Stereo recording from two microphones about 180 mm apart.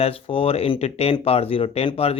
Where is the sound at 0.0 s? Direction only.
30° left (ahead or behind).